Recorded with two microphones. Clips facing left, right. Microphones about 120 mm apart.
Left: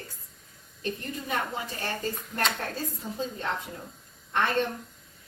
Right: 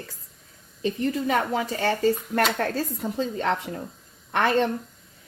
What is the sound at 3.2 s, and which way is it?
Speech, 75° right (ahead or behind).